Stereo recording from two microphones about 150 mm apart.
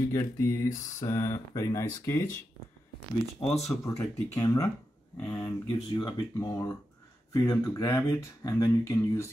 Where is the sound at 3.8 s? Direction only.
20° left (ahead or behind).